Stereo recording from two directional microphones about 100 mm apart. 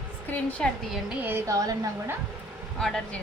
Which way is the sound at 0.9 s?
15° right (ahead or behind).